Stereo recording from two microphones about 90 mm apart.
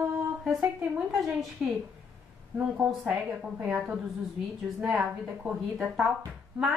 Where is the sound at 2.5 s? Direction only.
15° right (ahead or behind).